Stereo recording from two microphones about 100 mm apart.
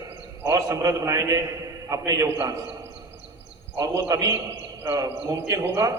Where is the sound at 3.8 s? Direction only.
35° right (ahead or behind).